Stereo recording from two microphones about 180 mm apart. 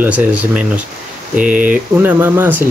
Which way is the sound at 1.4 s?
50° right (ahead or behind).